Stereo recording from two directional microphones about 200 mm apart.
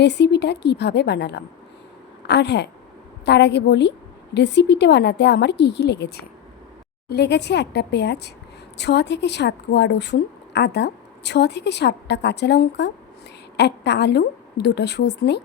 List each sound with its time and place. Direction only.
0.0 s a woman's voice: 60° left (ahead or behind)